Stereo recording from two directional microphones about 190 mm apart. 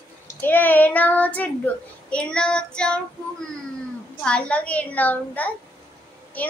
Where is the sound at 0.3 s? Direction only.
10° left (ahead or behind).